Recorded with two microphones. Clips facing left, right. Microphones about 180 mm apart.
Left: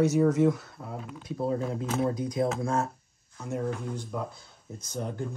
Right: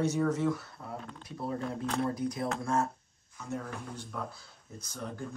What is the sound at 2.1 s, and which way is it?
Speech, 90° left.